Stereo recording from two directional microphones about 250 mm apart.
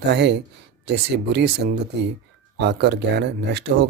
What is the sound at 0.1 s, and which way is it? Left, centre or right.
Speech, right.